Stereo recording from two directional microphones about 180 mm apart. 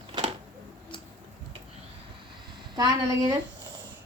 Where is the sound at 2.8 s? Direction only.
20° right (ahead or behind).